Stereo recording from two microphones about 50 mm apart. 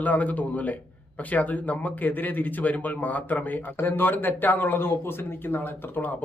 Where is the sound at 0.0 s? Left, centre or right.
Left.